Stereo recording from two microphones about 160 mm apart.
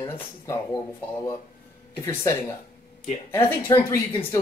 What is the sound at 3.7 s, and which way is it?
Speech, 25° left (ahead or behind).